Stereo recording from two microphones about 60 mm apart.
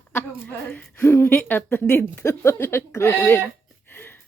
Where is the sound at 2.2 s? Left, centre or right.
Left.